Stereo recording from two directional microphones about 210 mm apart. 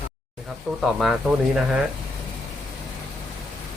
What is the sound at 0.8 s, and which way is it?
Speech, centre (ahead or behind).